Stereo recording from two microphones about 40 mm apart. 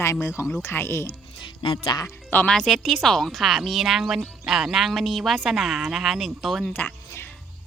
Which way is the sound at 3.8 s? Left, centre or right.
Centre.